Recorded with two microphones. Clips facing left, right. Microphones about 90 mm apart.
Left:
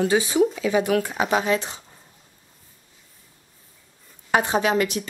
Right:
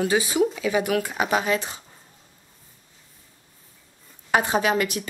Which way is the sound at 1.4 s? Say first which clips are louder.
Left 2 dB; 25° left (ahead or behind).